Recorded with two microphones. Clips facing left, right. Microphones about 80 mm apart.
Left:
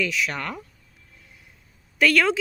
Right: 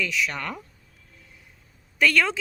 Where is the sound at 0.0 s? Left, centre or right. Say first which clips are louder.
Left 1 dB; left.